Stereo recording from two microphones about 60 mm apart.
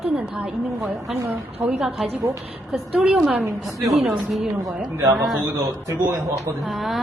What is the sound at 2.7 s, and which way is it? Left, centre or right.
Speech, centre.